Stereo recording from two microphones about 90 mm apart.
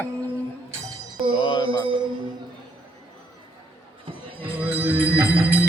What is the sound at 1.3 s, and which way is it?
Mantra, 55° left (ahead or behind).